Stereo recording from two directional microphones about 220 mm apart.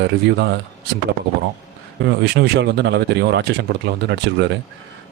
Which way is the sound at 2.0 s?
50° right (ahead or behind).